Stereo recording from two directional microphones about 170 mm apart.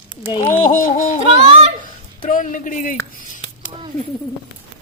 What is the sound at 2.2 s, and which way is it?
Speech, 50° left (ahead or behind).